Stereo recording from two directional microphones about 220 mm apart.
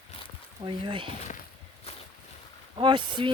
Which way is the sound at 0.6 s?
20° right (ahead or behind).